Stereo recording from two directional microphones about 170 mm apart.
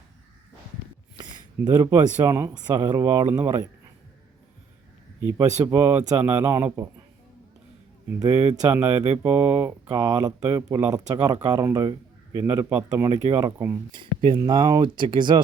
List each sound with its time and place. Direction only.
1.2 s speech: 25° right (ahead or behind)
5.4 s speech: 20° right (ahead or behind)
8.2 s speech: 20° right (ahead or behind)
9.1 s speech: 10° right (ahead or behind); by 15.4 s 25° right (ahead or behind)